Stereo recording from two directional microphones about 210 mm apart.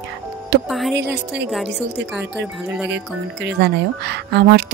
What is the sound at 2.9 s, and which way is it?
Speech, 55° right (ahead or behind).